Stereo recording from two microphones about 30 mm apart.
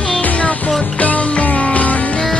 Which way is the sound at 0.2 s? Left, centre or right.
Left.